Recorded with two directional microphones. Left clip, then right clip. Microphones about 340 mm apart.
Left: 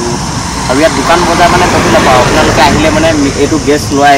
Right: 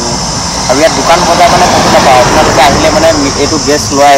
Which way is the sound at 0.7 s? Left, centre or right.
Centre.